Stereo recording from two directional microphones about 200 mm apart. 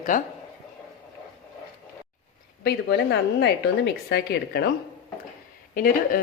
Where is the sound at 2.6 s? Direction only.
55° left (ahead or behind).